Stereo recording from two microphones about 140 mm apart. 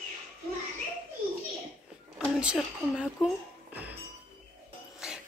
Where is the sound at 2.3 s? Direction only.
5° right (ahead or behind).